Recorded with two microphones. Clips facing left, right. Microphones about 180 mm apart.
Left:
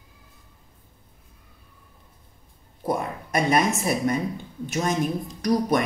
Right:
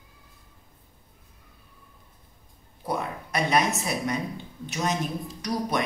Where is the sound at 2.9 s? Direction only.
50° left (ahead or behind).